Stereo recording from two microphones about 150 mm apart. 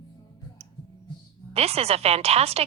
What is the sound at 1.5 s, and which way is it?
Speech, 45° right (ahead or behind).